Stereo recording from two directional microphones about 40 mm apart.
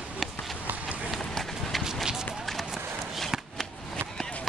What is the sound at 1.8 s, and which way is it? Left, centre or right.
Run, centre.